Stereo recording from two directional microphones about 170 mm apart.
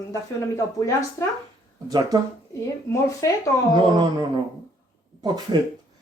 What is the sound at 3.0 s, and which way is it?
Speech, 20° left (ahead or behind).